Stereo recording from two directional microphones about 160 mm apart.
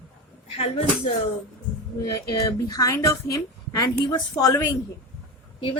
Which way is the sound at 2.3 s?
20° left (ahead or behind).